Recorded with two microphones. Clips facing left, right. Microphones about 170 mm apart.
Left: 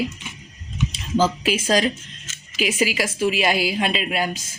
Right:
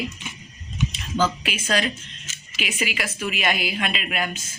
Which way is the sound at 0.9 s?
35° left (ahead or behind).